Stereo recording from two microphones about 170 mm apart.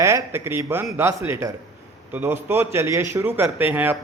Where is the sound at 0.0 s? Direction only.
15° right (ahead or behind).